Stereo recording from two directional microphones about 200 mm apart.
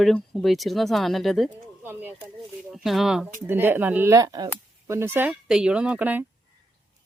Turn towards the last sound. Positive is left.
turn(degrees=-10)  # may be behind; listen again after turning